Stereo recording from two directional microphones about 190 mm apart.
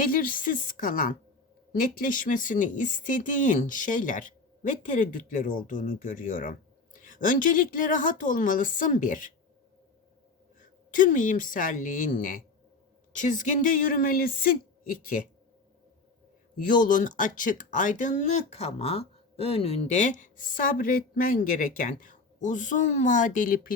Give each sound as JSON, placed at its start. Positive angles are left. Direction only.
{"t": 0.0, "sound": "speech", "side_deg": 45}
{"t": 10.6, "sound": "a woman's voice", "side_deg": 45}
{"t": 16.6, "sound": "speech", "side_deg": 45}